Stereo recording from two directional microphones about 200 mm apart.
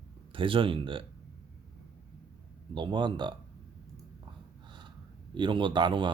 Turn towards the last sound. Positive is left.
turn(degrees=-25)  # may be behind; listen again after turning